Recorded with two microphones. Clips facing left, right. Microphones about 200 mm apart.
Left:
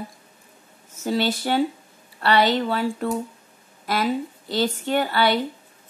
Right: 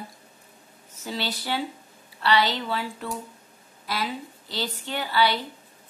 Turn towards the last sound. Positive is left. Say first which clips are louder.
# left 4 dB
turn(degrees=50)  # may be behind; listen again after turning